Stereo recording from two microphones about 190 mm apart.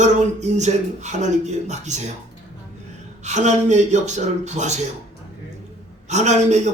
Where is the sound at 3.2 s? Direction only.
40° right (ahead or behind).